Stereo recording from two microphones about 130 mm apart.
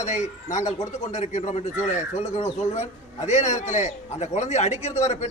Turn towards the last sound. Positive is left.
turn(degrees=60)  # may be behind; listen again after turning